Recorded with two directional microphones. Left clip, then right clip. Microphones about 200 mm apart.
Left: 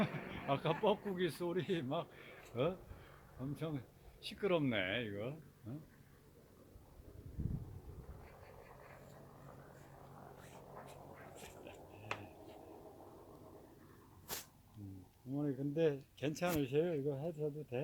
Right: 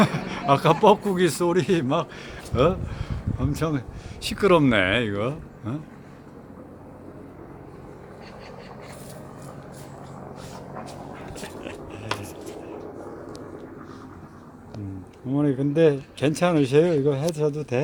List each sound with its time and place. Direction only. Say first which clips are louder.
0.0 s speech: right 18 dB; 15° right (ahead or behind)
15.3 s speech: right 17 dB; 10° right (ahead or behind)